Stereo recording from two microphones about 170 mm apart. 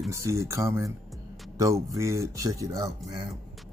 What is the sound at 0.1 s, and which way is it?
Speech, 15° right (ahead or behind).